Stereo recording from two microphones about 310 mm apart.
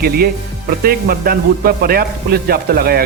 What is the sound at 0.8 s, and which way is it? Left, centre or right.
A man's voice, right.